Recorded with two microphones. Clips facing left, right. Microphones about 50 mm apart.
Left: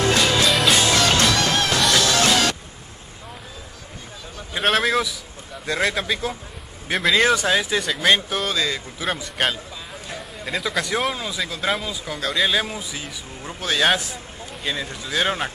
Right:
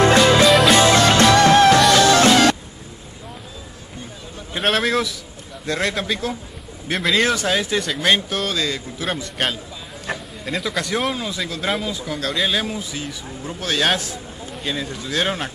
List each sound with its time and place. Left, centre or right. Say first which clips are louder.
0.2 s music: right 6 dB; centre
0.5 s music: right 5 dB; centre
0.7 s music: right 5 dB; right
4.6 s speech: even; centre